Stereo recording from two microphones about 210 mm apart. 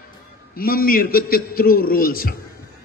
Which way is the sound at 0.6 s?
45° left (ahead or behind).